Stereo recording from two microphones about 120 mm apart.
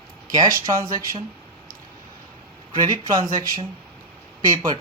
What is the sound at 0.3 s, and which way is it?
Speech, 30° right (ahead or behind).